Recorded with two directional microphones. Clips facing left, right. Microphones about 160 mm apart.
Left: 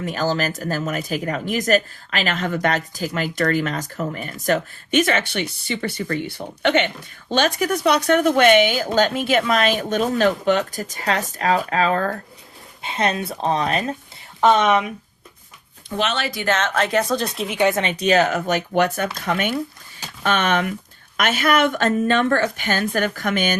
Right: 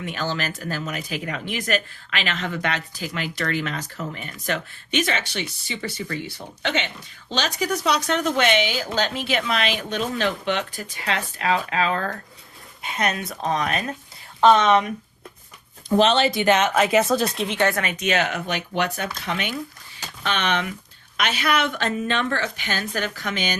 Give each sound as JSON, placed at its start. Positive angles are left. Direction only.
{"t": 0.0, "sound": "speech", "side_deg": 40}
{"t": 12.8, "sound": "speech", "side_deg": 25}
{"t": 14.4, "sound": "speech", "side_deg": 15}
{"t": 15.9, "sound": "speech", "side_deg": -35}
{"t": 17.6, "sound": "speech", "side_deg": 20}